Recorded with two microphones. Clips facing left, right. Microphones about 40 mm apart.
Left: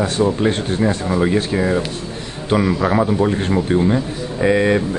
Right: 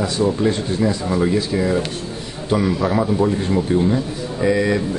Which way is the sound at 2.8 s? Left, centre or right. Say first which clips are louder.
Left 1 dB; left.